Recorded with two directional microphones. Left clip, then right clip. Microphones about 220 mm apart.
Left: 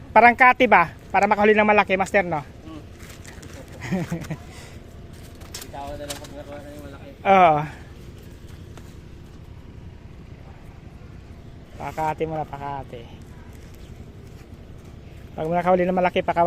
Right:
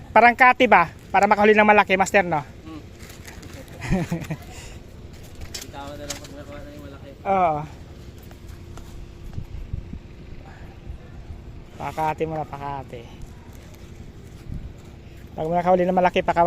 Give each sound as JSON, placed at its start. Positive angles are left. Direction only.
{"t": 0.1, "sound": "a woman's voice", "side_deg": -5}
{"t": 3.2, "sound": "a sound", "side_deg": -5}
{"t": 7.3, "sound": "speech", "side_deg": 15}
{"t": 11.8, "sound": "speech", "side_deg": 0}
{"t": 15.4, "sound": "speech", "side_deg": 0}